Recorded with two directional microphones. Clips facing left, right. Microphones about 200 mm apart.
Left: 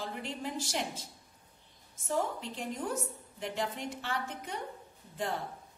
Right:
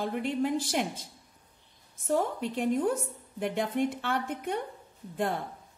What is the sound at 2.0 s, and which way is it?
Speech, 55° right (ahead or behind).